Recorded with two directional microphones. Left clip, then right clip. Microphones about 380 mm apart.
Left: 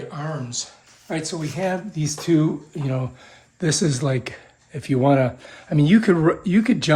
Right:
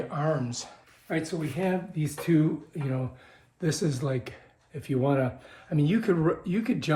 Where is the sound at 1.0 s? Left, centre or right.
Centre.